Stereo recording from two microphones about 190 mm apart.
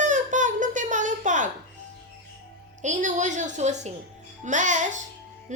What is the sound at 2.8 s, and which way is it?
Speech, 40° right (ahead or behind).